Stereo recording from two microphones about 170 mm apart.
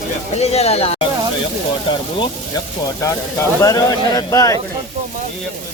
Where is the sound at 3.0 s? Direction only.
20° left (ahead or behind).